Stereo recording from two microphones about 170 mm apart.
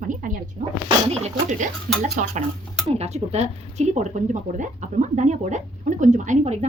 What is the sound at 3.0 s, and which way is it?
Speech, 40° right (ahead or behind).